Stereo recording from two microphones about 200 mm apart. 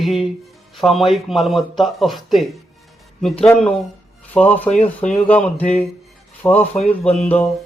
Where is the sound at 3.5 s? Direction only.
5° left (ahead or behind).